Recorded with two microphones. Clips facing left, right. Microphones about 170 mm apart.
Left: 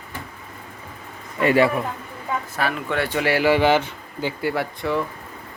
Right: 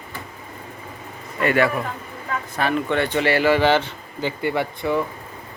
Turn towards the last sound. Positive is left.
turn(degrees=0)  # may be behind; listen again after turning